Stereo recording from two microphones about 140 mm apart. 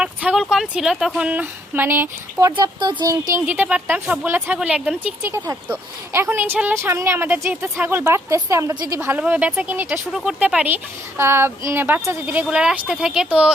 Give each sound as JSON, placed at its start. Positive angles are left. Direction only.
{"t": 0.0, "sound": "a woman's voice", "side_deg": -10}
{"t": 2.6, "sound": "speech", "side_deg": -30}
{"t": 3.4, "sound": "a woman's voice", "side_deg": -10}
{"t": 8.7, "sound": "a woman's voice", "side_deg": -30}
{"t": 9.0, "sound": "a woman's voice", "side_deg": -15}